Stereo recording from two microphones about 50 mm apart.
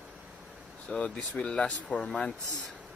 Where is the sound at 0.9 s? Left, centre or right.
Centre.